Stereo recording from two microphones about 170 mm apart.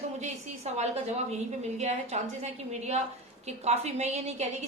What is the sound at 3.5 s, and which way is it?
Speech, 40° right (ahead or behind).